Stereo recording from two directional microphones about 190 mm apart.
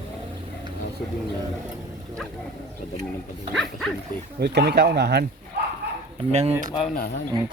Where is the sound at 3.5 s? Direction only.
Centre (ahead or behind).